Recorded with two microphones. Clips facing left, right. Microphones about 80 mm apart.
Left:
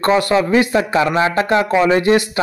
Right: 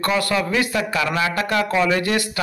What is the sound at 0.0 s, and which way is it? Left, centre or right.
A man's voice, left.